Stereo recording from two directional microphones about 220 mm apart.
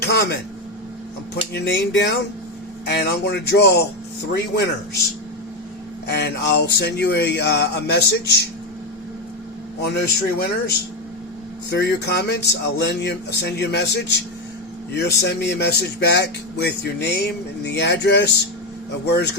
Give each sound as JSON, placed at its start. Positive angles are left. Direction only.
{"t": 0.0, "sound": "a sound", "side_deg": 50}
{"t": 1.5, "sound": "speech", "side_deg": 50}
{"t": 6.1, "sound": "speech", "side_deg": 50}
{"t": 9.8, "sound": "speech", "side_deg": 45}